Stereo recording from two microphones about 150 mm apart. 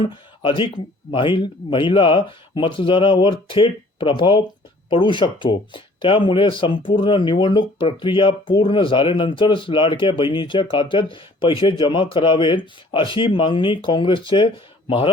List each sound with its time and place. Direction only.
0.0 s speech: 35° left (ahead or behind)